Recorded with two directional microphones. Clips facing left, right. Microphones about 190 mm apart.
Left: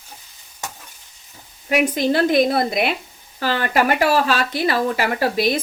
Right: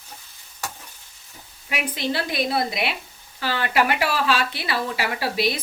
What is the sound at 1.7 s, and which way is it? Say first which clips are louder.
Speech: left 9 dB; 45° left (ahead or behind).